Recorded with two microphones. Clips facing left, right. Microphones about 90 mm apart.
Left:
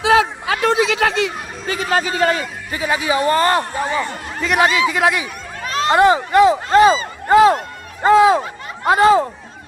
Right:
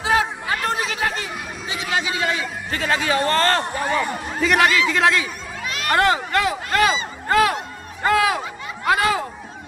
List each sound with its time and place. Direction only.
0.0 s a woman's voice: 90° left
1.7 s a man's voice: 45° left (ahead or behind)
2.7 s speech: 15° left (ahead or behind)
4.0 s speech: 5° right (ahead or behind)
4.6 s speech: 20° left (ahead or behind)
5.6 s a sound: 35° left (ahead or behind)
5.9 s speech: 20° left (ahead or behind)
8.0 s a sound: 20° left (ahead or behind)
8.8 s speech: 30° left (ahead or behind)